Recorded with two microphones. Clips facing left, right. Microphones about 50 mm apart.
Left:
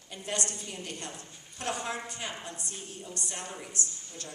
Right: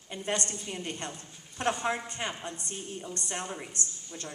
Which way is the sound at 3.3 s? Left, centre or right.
Right.